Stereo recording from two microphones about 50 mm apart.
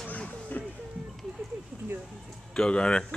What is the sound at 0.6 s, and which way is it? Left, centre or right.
Music, left.